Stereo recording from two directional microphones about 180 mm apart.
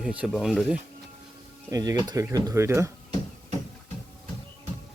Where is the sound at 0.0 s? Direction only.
5° right (ahead or behind).